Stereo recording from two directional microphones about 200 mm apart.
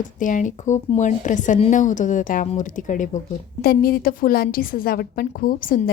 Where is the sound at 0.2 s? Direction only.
40° left (ahead or behind).